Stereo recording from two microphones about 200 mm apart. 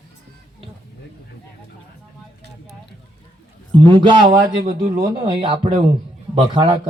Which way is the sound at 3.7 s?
25° right (ahead or behind).